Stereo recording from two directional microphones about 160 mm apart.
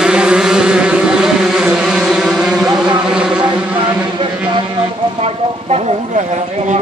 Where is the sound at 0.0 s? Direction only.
5° right (ahead or behind).